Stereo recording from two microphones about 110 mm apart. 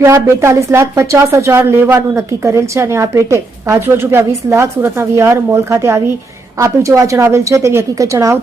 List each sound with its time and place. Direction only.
0.0 s speech: 25° right (ahead or behind)